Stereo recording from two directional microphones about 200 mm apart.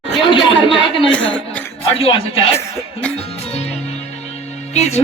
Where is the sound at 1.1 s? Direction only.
5° left (ahead or behind).